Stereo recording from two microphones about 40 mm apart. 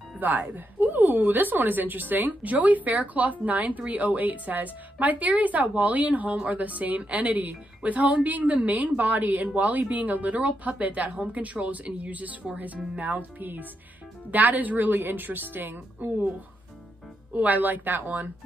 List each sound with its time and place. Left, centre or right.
0.2 s a woman's voice: right
13.4 s a woman's voice: right
17.3 s a woman's voice: right